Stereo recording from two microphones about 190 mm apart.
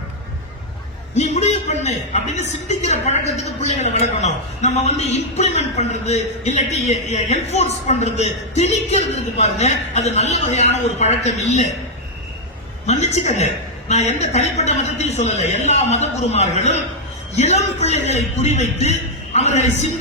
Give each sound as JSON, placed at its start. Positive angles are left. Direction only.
{"t": 1.1, "sound": "a man's voice", "side_deg": 35}
{"t": 12.8, "sound": "a man's voice", "side_deg": 35}